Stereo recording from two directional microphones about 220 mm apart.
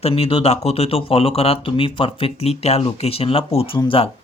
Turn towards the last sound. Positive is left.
turn(degrees=25)  # may be behind; listen again after turning